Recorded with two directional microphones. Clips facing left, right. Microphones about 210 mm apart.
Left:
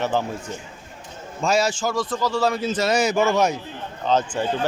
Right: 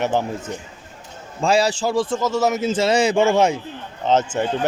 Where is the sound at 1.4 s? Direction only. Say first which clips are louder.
Right 3 dB; 30° right (ahead or behind).